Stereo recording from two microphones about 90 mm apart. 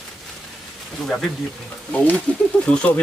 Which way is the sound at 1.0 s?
5° left (ahead or behind).